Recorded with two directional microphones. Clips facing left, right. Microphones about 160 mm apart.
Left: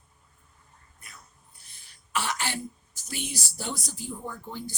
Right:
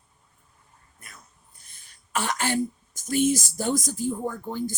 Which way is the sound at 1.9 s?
45° right (ahead or behind).